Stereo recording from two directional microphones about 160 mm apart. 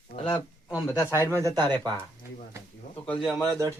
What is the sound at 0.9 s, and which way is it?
Speech, 20° left (ahead or behind).